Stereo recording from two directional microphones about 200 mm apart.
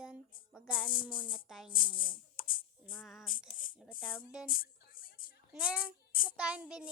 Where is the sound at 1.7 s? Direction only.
25° left (ahead or behind).